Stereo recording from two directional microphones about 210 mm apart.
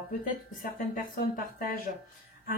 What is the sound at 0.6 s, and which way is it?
Speech, 40° left (ahead or behind).